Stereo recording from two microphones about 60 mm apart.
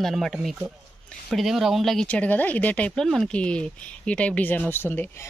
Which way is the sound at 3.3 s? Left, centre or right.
Centre.